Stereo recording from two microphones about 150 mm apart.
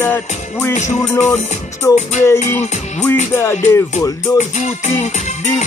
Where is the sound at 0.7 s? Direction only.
50° left (ahead or behind).